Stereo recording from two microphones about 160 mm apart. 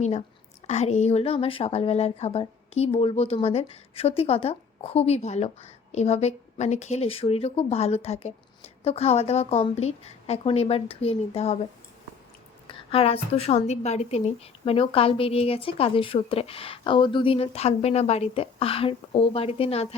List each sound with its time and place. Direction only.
0.0 s a woman's voice: 45° left (ahead or behind)
12.9 s a woman's voice: 40° left (ahead or behind)